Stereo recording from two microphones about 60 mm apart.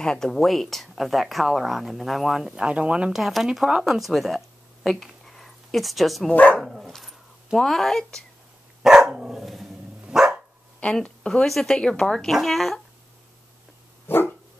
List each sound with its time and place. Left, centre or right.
0.0 s speech: centre
2.5 s speech: centre
3.1 s speech: centre
4.8 s a sound: centre
6.3 s speech: left
6.6 s dog: centre
7.5 s speech: centre
9.1 s dog: centre
10.8 s speech: centre
14.1 s dog: left